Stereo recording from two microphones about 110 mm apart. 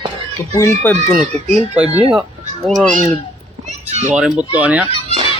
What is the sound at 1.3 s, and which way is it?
Speech, 90° right.